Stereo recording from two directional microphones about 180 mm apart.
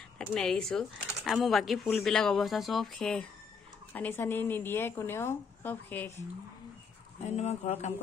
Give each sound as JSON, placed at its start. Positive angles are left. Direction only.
{"t": 0.2, "sound": "a woman's voice", "side_deg": 5}
{"t": 7.2, "sound": "speech", "side_deg": 35}